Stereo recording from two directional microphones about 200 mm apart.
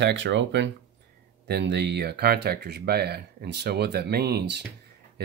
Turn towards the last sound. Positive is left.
turn(degrees=-50)  # may be behind; listen again after turning